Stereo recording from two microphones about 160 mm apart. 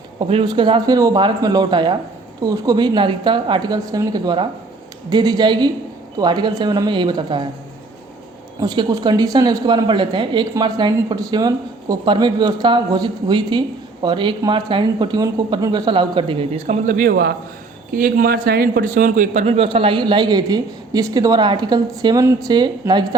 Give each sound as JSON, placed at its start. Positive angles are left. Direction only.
{"t": 0.2, "sound": "a man's voice", "side_deg": -30}
{"t": 8.6, "sound": "a man's voice", "side_deg": -25}
{"t": 16.8, "sound": "a man's voice", "side_deg": -60}